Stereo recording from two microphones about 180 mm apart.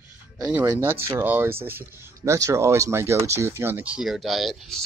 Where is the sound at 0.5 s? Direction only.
10° right (ahead or behind).